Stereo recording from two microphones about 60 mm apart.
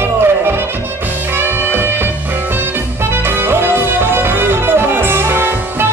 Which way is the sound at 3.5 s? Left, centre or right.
Right.